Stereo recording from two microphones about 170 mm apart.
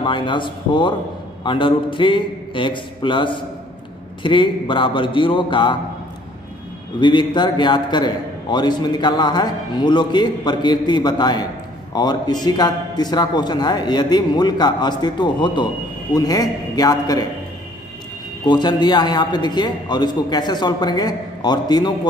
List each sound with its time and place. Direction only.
0.0 s a man's voice: 30° left (ahead or behind)
7.0 s a man's voice: 25° left (ahead or behind)
18.5 s a man's voice: 25° left (ahead or behind)